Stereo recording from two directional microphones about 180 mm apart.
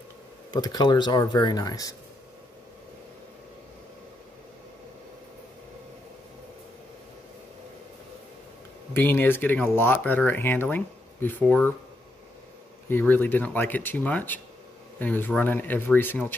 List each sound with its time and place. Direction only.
0.5 s speech: 25° left (ahead or behind)
8.9 s speech: 10° left (ahead or behind)
12.9 s speech: 10° left (ahead or behind)